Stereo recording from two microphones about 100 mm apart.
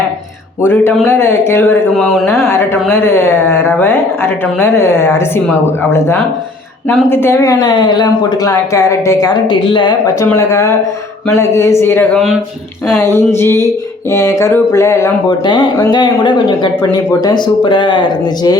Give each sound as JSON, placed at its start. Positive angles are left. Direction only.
{"t": 1.0, "sound": "a woman's voice", "side_deg": 25}
{"t": 2.0, "sound": "speech", "side_deg": 0}
{"t": 2.5, "sound": "a woman's voice", "side_deg": 25}
{"t": 7.1, "sound": "a woman's voice", "side_deg": 25}
{"t": 7.4, "sound": "a woman's voice", "side_deg": 45}
{"t": 9.5, "sound": "speech", "side_deg": 50}
{"t": 10.3, "sound": "a woman's voice", "side_deg": 30}
{"t": 12.1, "sound": "speech", "side_deg": 0}
{"t": 13.0, "sound": "a woman's voice", "side_deg": 25}
{"t": 15.3, "sound": "speech", "side_deg": 50}